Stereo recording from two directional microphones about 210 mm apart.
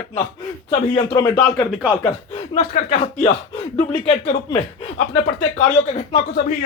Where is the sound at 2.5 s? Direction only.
35° left (ahead or behind).